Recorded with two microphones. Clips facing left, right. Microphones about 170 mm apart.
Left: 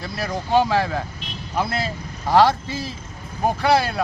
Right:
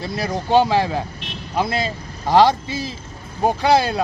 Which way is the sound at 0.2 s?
20° right (ahead or behind).